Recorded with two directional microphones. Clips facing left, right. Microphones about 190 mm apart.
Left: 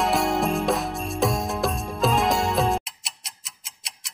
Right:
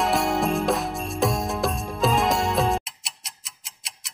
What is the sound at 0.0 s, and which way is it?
Music, centre (ahead or behind).